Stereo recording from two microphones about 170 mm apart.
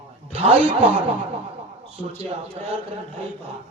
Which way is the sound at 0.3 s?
35° right (ahead or behind).